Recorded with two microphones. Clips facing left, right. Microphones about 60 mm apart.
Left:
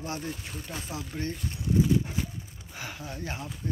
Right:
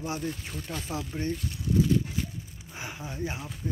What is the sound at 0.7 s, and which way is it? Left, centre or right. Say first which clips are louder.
Speech: right 2 dB; centre.